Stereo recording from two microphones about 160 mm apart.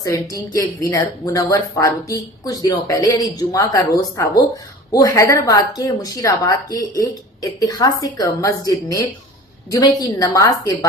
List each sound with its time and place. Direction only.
0.0 s speech: 20° left (ahead or behind)